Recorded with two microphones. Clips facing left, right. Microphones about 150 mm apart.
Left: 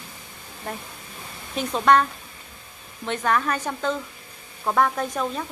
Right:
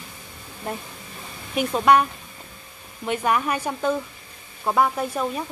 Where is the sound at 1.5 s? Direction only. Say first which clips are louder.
Right 1 dB; 10° right (ahead or behind).